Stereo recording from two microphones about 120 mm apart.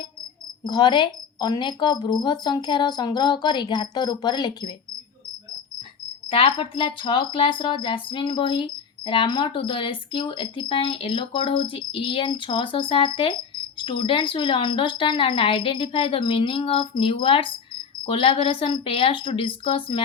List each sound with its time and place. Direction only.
0.6 s a woman's voice: 40° left (ahead or behind)
6.2 s speech: 50° left (ahead or behind)